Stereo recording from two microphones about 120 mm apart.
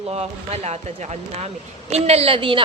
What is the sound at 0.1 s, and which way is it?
Speech, 65° right (ahead or behind).